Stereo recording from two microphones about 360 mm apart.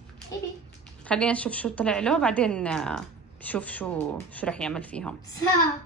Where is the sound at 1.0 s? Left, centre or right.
Centre.